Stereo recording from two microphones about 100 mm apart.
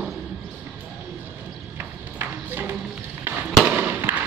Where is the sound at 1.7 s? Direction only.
20° right (ahead or behind).